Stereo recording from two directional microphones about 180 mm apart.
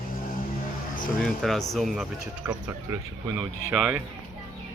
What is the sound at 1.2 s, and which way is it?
Speech, centre (ahead or behind).